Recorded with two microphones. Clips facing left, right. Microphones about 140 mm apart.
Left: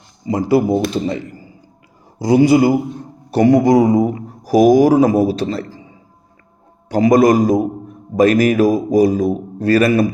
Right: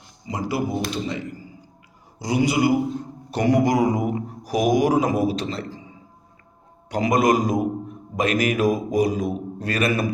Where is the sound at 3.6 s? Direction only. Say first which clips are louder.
Left 8 dB; 30° left (ahead or behind).